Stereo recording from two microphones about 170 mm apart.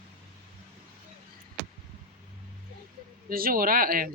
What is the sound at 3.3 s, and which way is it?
Speech, 60° right (ahead or behind).